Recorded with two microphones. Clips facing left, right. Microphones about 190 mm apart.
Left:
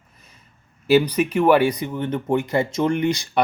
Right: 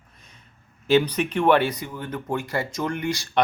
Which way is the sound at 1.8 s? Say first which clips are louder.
Left 7 dB; 20° left (ahead or behind).